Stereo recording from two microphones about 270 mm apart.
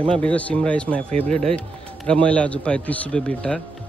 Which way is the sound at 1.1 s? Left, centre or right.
Right.